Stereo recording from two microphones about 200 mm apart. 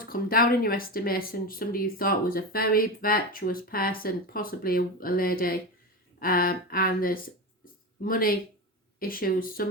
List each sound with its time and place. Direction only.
0.0 s speech: 45° left (ahead or behind)
7.6 s a sound: 45° left (ahead or behind)
9.0 s speech: 45° left (ahead or behind)